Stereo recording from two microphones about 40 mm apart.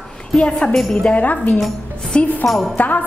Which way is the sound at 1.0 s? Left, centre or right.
Left.